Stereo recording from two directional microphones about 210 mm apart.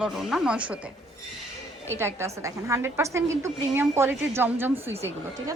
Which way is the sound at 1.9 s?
10° right (ahead or behind).